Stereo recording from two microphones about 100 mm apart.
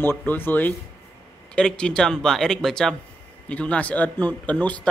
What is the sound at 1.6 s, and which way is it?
Speech, 10° left (ahead or behind).